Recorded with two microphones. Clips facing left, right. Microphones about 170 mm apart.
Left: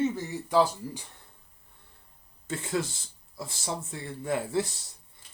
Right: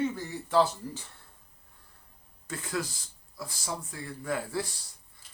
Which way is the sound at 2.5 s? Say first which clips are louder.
Left 3 dB; 25° left (ahead or behind).